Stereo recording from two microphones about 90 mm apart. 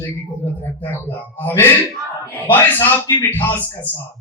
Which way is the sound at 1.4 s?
25° left (ahead or behind).